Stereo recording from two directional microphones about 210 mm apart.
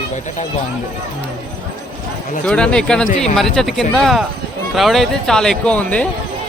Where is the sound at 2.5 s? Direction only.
5° left (ahead or behind).